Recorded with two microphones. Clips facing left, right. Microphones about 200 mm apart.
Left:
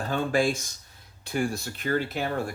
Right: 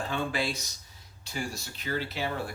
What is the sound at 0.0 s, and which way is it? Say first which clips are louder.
Speech: left 6 dB; 45° left (ahead or behind).